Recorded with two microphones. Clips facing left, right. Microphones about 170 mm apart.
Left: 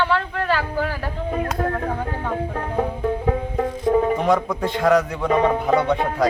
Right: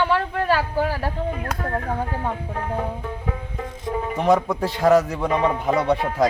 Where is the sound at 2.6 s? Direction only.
45° left (ahead or behind).